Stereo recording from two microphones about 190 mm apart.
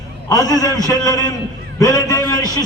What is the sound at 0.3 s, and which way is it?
A man's voice, 20° left (ahead or behind).